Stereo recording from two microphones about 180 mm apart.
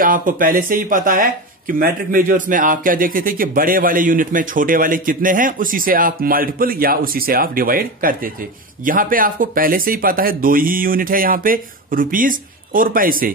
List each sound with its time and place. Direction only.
0.0 s speech: 50° right (ahead or behind)